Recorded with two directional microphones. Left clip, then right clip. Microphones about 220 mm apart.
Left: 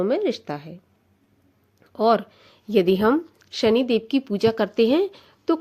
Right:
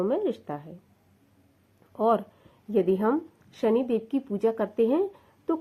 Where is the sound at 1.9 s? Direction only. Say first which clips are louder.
Left 5 dB; 30° left (ahead or behind).